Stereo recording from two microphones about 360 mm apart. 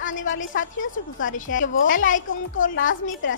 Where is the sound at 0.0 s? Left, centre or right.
Left.